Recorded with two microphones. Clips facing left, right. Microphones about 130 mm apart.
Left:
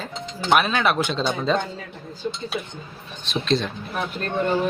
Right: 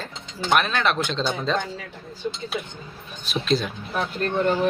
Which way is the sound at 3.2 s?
5° right (ahead or behind).